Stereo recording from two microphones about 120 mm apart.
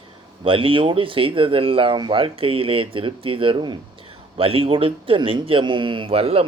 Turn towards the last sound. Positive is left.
turn(degrees=-55)  # may be behind; listen again after turning